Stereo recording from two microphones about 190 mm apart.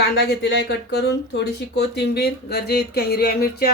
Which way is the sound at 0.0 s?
60° left (ahead or behind).